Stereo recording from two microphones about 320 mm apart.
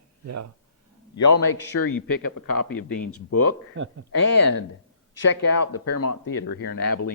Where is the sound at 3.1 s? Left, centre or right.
Left.